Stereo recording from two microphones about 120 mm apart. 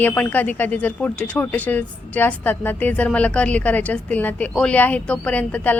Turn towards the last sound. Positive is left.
turn(degrees=10)  # may be behind; listen again after turning